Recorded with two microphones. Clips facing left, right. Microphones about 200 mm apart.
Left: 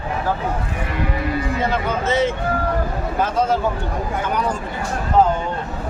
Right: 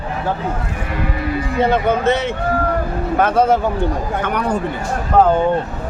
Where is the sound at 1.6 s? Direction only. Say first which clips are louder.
Right 11 dB; 60° right (ahead or behind).